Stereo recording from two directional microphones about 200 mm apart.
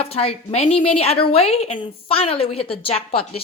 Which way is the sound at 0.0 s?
30° left (ahead or behind).